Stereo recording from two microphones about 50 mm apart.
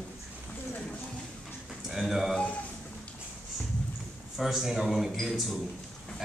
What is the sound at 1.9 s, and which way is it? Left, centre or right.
Speech, centre.